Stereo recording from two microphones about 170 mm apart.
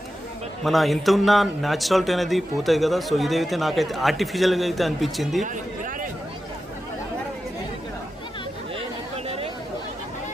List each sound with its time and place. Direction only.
0.6 s a man's voice: centre (ahead or behind)
5.4 s a sound: 50° right (ahead or behind)
9.1 s chatter: 35° right (ahead or behind)